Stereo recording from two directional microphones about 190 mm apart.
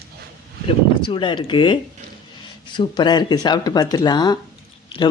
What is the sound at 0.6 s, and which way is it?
Speech, 25° left (ahead or behind).